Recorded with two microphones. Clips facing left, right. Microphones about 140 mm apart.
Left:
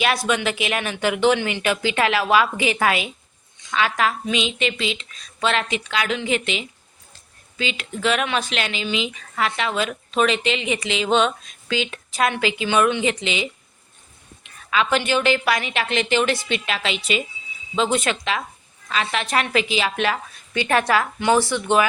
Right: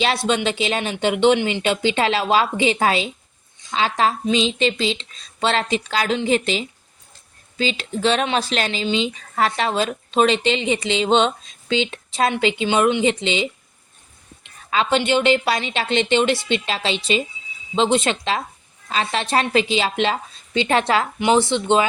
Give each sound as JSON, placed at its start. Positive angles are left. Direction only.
{"t": 0.0, "sound": "a woman's voice", "side_deg": -25}
{"t": 14.7, "sound": "speech", "side_deg": -30}